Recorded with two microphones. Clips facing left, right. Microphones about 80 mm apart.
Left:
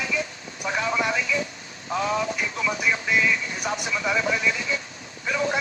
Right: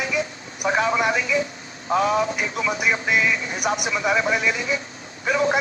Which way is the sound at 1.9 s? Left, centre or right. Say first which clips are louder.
Right 5 dB; right.